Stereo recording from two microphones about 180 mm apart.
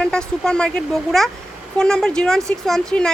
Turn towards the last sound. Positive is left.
turn(degrees=5)  # may be behind; listen again after turning